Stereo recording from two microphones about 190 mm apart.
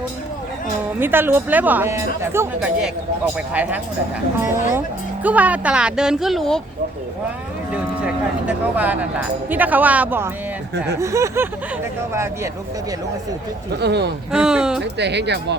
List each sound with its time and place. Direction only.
0.9 s speech: 10° right (ahead or behind)
5.2 s speech: 10° right (ahead or behind)
7.7 s speech: 5° right (ahead or behind)
13.7 s speech: 60° right (ahead or behind)
14.3 s speech: 5° right (ahead or behind)
14.9 s speech: 65° right (ahead or behind)